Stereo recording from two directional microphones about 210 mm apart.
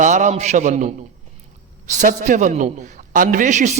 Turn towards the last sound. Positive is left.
turn(degrees=-35)  # may be behind; listen again after turning